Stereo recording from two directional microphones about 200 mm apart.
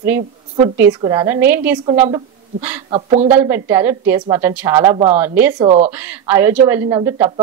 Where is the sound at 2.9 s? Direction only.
30° right (ahead or behind).